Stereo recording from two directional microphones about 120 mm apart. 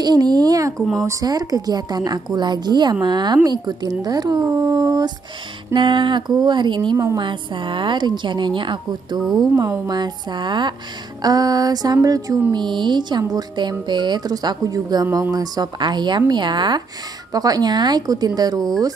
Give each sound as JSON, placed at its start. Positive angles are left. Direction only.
{"t": 0.0, "sound": "a woman's voice", "side_deg": -35}
{"t": 0.7, "sound": "speech", "side_deg": 5}
{"t": 1.0, "sound": "a woman's voice", "side_deg": -30}
{"t": 5.7, "sound": "a woman's voice", "side_deg": -40}